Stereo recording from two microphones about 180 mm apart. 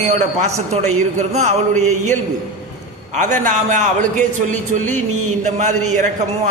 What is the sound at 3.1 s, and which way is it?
A man's voice, 40° right (ahead or behind).